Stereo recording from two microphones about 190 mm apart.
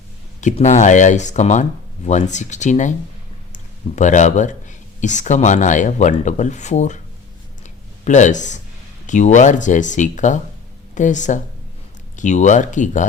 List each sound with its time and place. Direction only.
0.4 s speech: 40° left (ahead or behind)
7.6 s a sound: 40° left (ahead or behind)
9.0 s speech: 40° left (ahead or behind)